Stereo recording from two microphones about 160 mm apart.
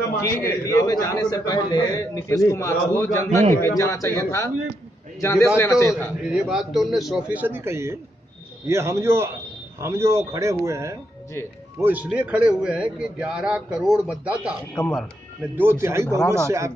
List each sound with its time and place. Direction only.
0.2 s a man's voice: 20° left (ahead or behind)
6.2 s a man's voice: 5° right (ahead or behind)
14.8 s a man's voice: 5° left (ahead or behind)
15.5 s a man's voice: 15° right (ahead or behind)